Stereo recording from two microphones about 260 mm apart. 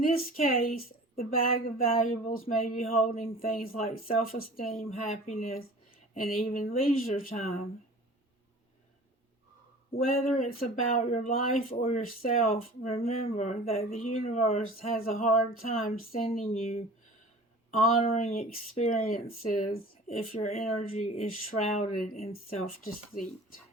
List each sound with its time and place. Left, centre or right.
0.6 s a sound: left
1.6 s speech: left
9.9 s speech: left